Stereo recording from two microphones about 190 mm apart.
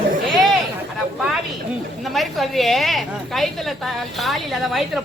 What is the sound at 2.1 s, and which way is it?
A woman's voice, centre (ahead or behind).